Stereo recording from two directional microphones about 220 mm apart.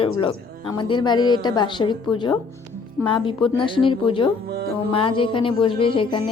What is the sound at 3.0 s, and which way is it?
Speech, 20° left (ahead or behind).